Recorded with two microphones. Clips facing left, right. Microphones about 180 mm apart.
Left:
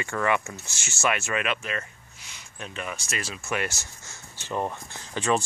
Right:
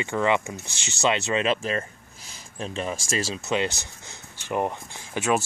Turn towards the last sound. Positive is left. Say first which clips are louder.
# right 1 dB
turn(degrees=-5)  # may be behind; listen again after turning